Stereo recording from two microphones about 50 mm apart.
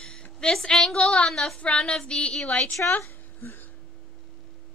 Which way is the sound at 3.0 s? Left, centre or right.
Left.